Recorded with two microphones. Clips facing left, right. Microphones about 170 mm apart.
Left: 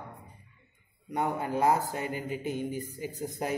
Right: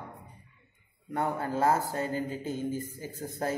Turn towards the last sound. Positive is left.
turn(degrees=15)  # may be behind; listen again after turning